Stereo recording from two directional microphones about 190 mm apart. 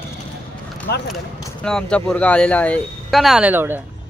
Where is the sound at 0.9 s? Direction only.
60° left (ahead or behind).